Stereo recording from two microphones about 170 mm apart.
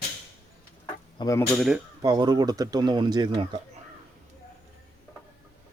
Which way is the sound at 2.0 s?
25° right (ahead or behind).